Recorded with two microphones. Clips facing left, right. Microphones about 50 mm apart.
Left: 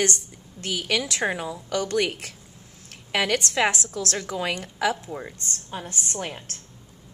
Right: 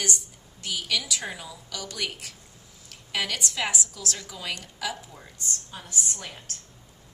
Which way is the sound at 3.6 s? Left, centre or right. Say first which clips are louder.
Left 6 dB; left.